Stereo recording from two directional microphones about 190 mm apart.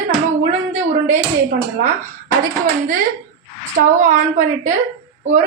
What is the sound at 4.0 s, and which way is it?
Speech, 40° right (ahead or behind).